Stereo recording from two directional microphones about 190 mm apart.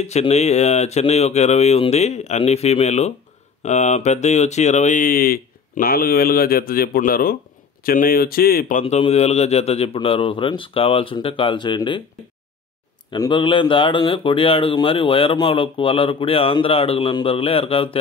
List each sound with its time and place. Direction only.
0.0 s speech: 35° left (ahead or behind)
8.8 s speech: 35° left (ahead or behind)
13.1 s speech: 25° left (ahead or behind)